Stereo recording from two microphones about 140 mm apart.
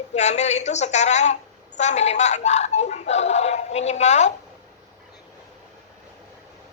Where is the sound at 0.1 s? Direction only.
55° left (ahead or behind).